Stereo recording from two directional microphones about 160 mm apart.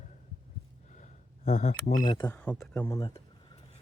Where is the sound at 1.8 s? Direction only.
60° left (ahead or behind).